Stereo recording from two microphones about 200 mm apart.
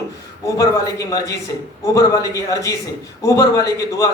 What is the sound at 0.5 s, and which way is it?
Speech, 15° left (ahead or behind).